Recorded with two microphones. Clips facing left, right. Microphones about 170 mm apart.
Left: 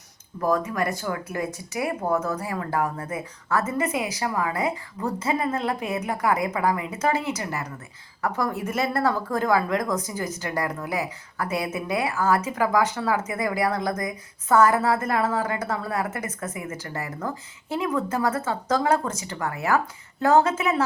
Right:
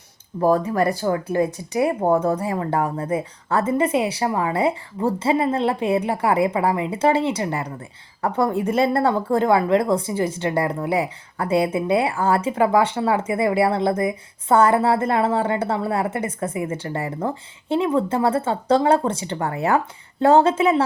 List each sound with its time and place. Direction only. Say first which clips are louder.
0.3 s speech: right 6 dB; 30° right (ahead or behind)